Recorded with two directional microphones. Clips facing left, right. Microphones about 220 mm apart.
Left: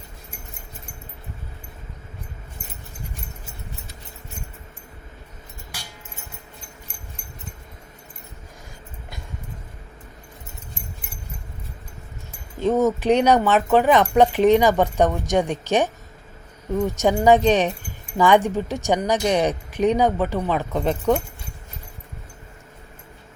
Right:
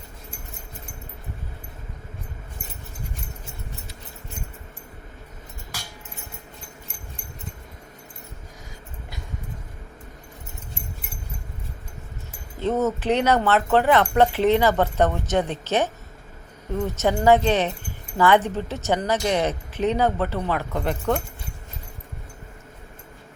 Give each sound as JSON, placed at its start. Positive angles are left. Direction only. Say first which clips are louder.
{"t": 12.5, "sound": "speech", "louder": "left 4 dB", "side_deg": 10}